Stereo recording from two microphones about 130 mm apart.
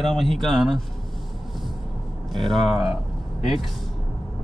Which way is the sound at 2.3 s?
Centre (ahead or behind).